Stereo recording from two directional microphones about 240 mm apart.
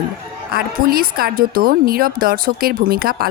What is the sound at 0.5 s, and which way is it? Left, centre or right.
Speech, right.